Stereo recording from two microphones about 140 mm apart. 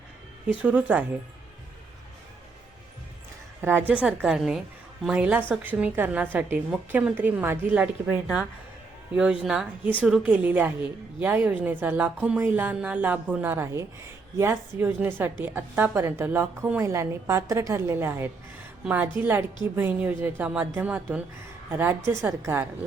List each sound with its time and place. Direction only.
0.4 s a woman's voice: 10° right (ahead or behind)
3.6 s a woman's voice: 15° right (ahead or behind)